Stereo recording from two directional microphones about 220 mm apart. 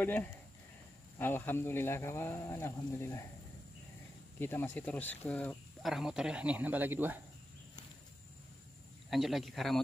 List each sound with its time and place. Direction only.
0.0 s speech: 10° left (ahead or behind)
4.4 s speech: 10° left (ahead or behind); by 7.2 s 10° right (ahead or behind)
9.1 s speech: centre (ahead or behind)